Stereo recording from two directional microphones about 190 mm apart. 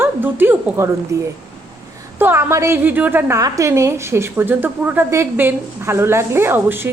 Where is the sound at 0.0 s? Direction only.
10° right (ahead or behind).